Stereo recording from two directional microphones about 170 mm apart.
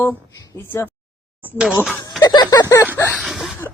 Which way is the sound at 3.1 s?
Centre (ahead or behind).